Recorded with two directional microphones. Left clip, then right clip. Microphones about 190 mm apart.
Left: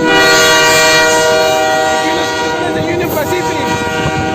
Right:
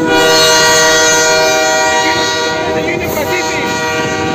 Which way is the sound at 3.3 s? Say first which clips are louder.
Even; 25° right (ahead or behind).